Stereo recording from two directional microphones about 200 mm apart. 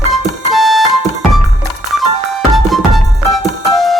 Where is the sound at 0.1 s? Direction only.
Centre (ahead or behind).